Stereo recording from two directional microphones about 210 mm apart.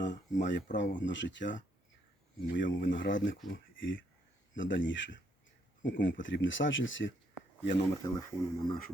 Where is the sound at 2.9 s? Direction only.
60° left (ahead or behind).